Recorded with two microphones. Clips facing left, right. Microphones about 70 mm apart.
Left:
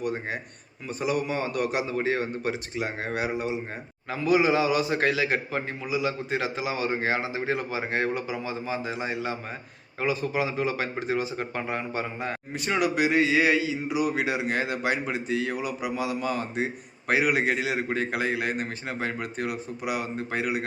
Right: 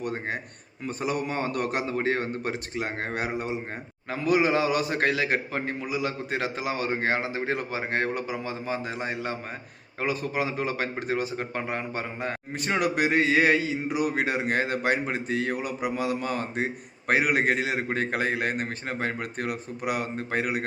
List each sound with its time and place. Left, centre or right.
0.0 s a man's voice: right